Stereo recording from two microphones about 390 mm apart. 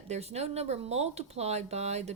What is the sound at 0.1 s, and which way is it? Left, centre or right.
Speech, centre.